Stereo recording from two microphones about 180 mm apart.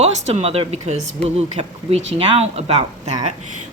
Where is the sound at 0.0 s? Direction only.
35° right (ahead or behind).